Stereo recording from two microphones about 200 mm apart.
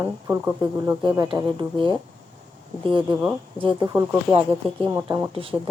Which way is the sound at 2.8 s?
25° right (ahead or behind).